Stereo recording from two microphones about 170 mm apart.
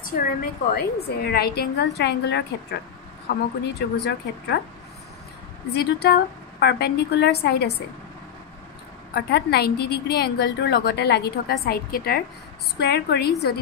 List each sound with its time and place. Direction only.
0.0 s a woman's voice: 60° left (ahead or behind); by 2.8 s 85° left
3.3 s a woman's voice: 70° left (ahead or behind)
6.0 s a woman's voice: 70° left (ahead or behind)
9.1 s a woman's voice: 70° left (ahead or behind)
12.7 s a woman's voice: 75° left (ahead or behind)